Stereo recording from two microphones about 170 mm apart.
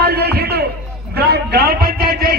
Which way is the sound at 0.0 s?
70° right (ahead or behind).